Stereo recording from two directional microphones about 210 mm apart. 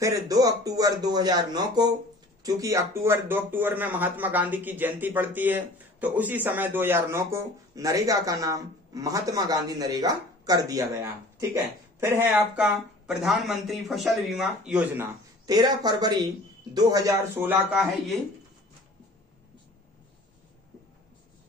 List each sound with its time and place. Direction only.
0.0 s speech: 15° right (ahead or behind)
15.4 s speech: 20° right (ahead or behind)
17.6 s speech: centre (ahead or behind)